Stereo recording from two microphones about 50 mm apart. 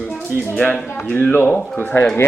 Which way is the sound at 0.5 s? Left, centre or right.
Left.